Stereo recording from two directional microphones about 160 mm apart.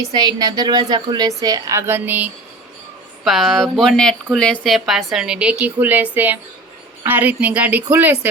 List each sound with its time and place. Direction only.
0.1 s a woman's voice: 25° right (ahead or behind); by 8.3 s 10° right (ahead or behind)